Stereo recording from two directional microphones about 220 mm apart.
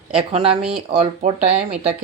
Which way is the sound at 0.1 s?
30° right (ahead or behind).